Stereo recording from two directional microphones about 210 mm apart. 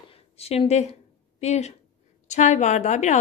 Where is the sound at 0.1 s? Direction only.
30° left (ahead or behind).